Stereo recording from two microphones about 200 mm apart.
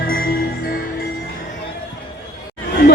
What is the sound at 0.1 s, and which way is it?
Music, 45° left (ahead or behind).